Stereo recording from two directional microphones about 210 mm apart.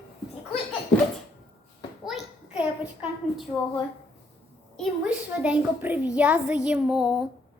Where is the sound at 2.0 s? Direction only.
5° right (ahead or behind).